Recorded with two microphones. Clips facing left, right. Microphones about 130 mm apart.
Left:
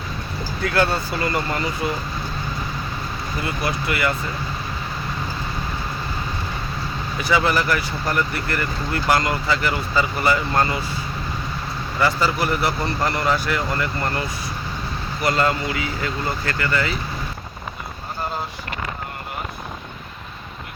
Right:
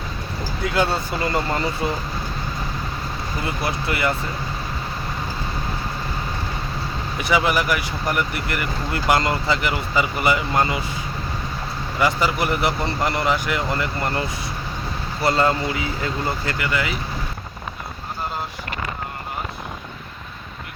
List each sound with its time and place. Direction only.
0.6 s speech: 20° right (ahead or behind)
3.4 s speech: 25° right (ahead or behind)
7.2 s speech: 20° right (ahead or behind)
11.9 s speech: 15° right (ahead or behind)